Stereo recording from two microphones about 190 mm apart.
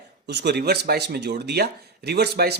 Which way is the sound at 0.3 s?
60° right (ahead or behind).